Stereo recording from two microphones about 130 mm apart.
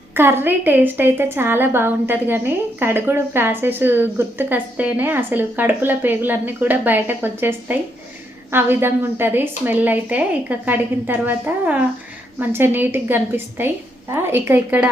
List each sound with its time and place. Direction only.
0.1 s a woman's voice: 15° right (ahead or behind)